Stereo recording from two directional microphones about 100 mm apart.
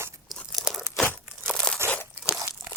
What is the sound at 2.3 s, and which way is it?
Crunch, 30° right (ahead or behind).